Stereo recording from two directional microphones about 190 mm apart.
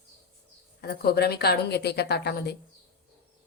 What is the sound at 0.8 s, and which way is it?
A woman's voice, 55° left (ahead or behind).